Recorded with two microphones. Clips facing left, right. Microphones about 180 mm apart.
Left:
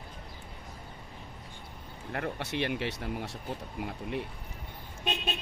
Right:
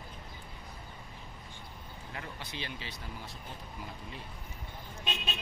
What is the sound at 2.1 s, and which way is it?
Speech, 65° left (ahead or behind).